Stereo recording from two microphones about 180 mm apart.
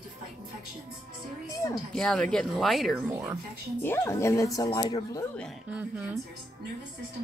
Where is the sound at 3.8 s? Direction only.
15° left (ahead or behind).